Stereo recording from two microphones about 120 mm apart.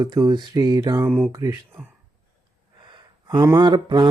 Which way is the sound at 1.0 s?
15° right (ahead or behind).